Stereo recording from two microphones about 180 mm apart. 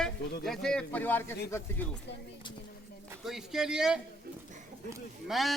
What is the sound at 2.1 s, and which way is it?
Speech, 75° left (ahead or behind).